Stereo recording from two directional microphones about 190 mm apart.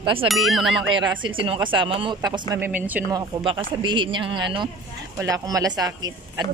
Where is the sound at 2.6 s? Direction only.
10° right (ahead or behind).